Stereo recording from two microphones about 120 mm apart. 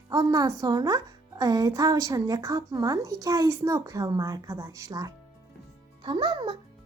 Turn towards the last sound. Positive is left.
turn(degrees=-40)  # may be behind; listen again after turning